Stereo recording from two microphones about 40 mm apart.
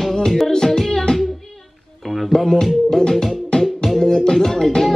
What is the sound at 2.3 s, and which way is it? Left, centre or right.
Music, centre.